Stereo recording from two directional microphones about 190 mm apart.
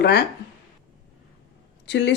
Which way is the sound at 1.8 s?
65° left (ahead or behind).